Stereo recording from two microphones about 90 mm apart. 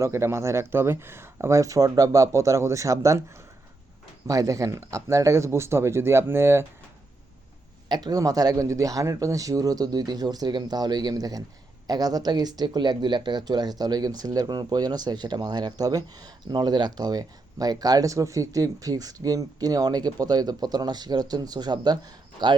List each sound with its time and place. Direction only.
0.0 s speech: 30° right (ahead or behind)
4.3 s speech: 40° right (ahead or behind)
7.9 s speech: 50° right (ahead or behind)